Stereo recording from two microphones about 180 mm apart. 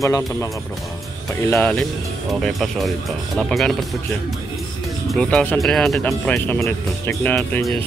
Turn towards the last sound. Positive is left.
turn(degrees=10)  # may be behind; listen again after turning